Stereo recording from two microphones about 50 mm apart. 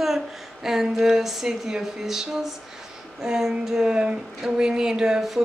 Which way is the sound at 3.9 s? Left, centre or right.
Centre.